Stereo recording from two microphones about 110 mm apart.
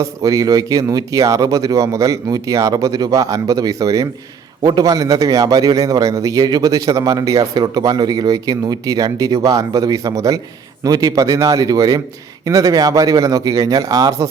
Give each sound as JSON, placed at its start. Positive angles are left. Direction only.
{"t": 0.0, "sound": "a man's voice", "side_deg": -30}